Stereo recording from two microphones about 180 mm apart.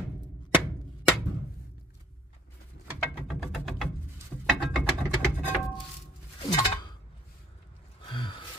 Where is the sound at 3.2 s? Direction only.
Centre (ahead or behind).